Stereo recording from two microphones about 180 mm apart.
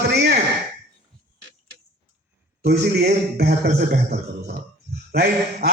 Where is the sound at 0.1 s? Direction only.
65° right (ahead or behind).